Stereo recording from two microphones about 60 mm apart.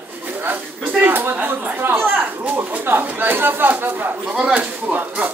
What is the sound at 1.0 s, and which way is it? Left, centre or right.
Speech, right.